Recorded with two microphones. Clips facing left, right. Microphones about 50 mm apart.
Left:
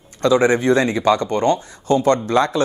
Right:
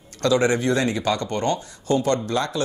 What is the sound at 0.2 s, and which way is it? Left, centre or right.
Speech, left.